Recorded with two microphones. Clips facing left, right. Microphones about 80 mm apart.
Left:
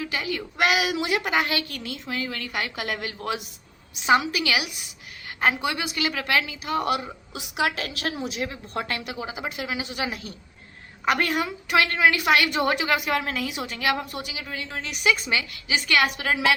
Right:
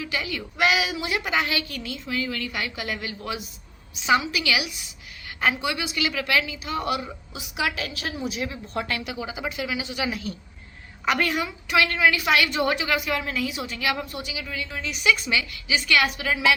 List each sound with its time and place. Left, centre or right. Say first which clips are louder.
0.0 s a woman's voice: left 1 dB; left
8.4 s a woman's voice: even; left
15.0 s a woman's voice: right 1 dB; left
16.0 s a woman's voice: even; left